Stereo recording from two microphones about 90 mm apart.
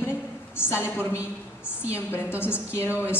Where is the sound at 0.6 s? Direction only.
25° left (ahead or behind).